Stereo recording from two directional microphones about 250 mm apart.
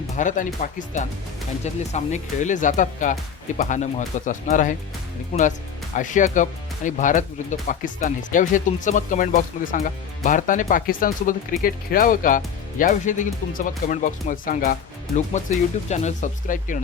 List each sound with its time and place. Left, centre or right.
0.2 s speech: left